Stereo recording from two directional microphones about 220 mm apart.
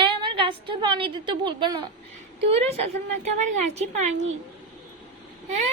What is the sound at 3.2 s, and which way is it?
A woman's voice, 30° right (ahead or behind).